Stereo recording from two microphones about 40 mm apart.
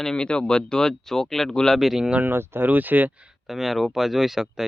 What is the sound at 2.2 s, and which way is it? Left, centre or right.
Speech, right.